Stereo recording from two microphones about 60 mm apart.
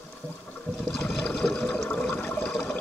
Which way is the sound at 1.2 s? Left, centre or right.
Centre.